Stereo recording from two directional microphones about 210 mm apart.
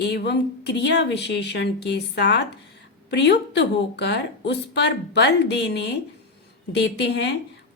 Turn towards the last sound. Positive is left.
turn(degrees=55)  # may be behind; listen again after turning